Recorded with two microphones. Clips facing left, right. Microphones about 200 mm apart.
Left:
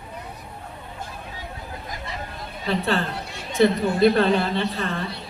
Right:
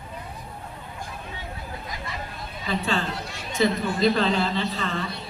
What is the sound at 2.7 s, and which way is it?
A man's voice, 65° left (ahead or behind).